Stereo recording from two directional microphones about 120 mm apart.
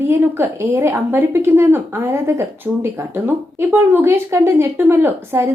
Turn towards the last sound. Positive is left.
turn(degrees=-20)  # may be behind; listen again after turning